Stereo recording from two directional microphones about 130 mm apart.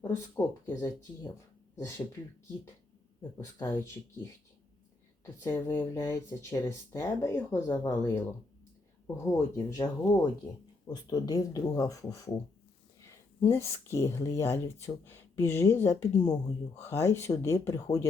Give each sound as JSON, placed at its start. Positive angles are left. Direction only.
{"t": 0.0, "sound": "speech", "side_deg": 20}
{"t": 5.2, "sound": "speech", "side_deg": 25}
{"t": 9.6, "sound": "speech", "side_deg": 30}
{"t": 13.5, "sound": "speech", "side_deg": 20}